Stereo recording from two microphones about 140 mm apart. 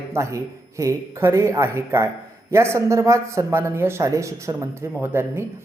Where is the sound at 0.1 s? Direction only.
20° right (ahead or behind).